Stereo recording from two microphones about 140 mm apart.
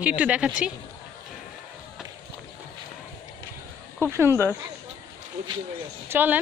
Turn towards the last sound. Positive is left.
turn(degrees=-15)  # may be behind; listen again after turning